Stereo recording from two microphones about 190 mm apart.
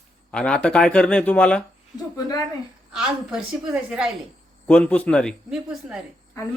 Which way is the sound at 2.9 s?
5° right (ahead or behind).